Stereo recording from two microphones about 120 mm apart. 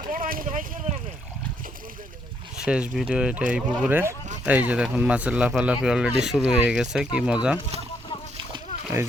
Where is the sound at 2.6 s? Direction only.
10° right (ahead or behind).